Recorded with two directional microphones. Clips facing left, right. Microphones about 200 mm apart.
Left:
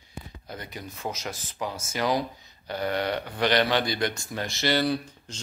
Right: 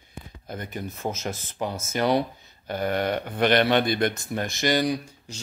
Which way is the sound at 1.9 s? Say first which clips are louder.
Right 4 dB; 60° right (ahead or behind).